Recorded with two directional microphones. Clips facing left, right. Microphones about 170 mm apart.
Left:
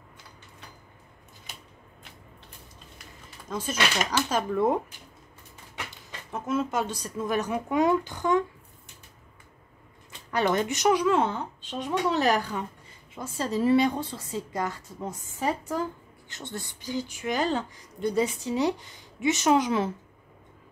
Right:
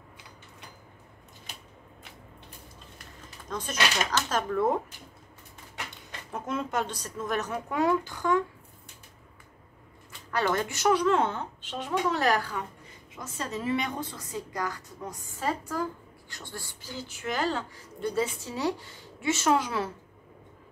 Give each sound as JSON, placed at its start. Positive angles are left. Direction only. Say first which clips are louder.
{"t": 3.4, "sound": "speech", "louder": "left 2 dB", "side_deg": 10}
{"t": 6.3, "sound": "speech", "louder": "left 3 dB", "side_deg": 5}
{"t": 10.3, "sound": "speech", "louder": "left 3 dB", "side_deg": 20}
{"t": 12.1, "sound": "speech", "louder": "left 3 dB", "side_deg": 20}
{"t": 13.1, "sound": "speech", "louder": "left 6 dB", "side_deg": 30}